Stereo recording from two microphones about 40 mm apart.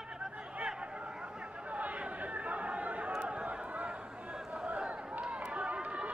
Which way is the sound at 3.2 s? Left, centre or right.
Right.